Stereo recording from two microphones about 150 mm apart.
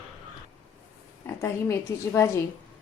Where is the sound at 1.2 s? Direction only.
15° left (ahead or behind).